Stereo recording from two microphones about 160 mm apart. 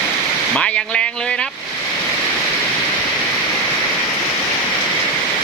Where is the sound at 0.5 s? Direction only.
5° left (ahead or behind).